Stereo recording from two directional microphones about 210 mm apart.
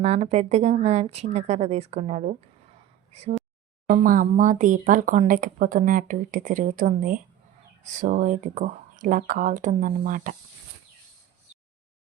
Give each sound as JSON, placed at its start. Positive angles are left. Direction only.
{"t": 0.0, "sound": "speech", "side_deg": -30}